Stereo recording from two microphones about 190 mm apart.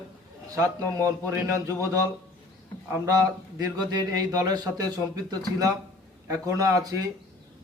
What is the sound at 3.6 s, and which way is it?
A man's voice, 20° right (ahead or behind).